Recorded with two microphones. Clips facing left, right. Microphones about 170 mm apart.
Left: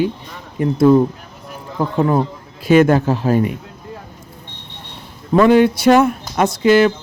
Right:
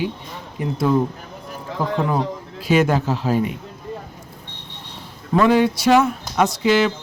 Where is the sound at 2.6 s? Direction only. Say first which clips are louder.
Left 6 dB; 55° left (ahead or behind).